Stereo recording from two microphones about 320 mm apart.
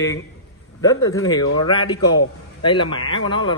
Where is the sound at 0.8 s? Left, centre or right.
Centre.